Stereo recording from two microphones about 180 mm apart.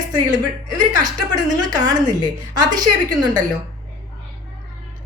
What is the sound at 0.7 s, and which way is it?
A woman's voice, 20° right (ahead or behind).